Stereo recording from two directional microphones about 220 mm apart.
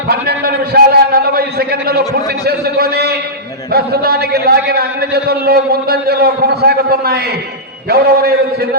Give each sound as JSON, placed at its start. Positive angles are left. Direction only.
{"t": 0.1, "sound": "a man's voice", "side_deg": -45}